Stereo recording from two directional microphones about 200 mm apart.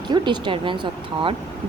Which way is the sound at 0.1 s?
25° right (ahead or behind).